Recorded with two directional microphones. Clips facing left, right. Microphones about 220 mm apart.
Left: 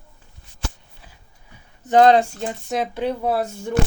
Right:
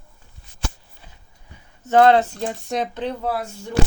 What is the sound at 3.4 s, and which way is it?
Speech, 50° left (ahead or behind).